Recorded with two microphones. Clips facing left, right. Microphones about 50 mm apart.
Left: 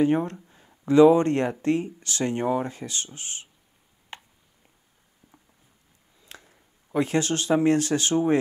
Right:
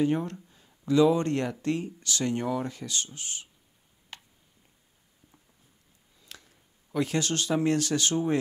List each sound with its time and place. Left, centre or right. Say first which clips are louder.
0.0 s speech: left 4 dB; left
4.1 s tick: left 5 dB; left
5.2 s a sound: left 4 dB; left
6.2 s speech: left 3 dB; left